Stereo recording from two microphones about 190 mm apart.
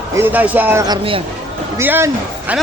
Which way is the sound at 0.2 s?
10° right (ahead or behind).